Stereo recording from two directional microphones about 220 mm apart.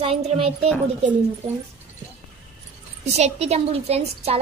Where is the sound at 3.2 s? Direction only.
30° right (ahead or behind).